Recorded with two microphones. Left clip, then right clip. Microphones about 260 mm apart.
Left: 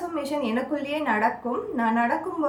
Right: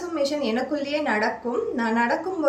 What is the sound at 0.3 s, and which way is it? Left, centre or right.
A woman's voice, centre.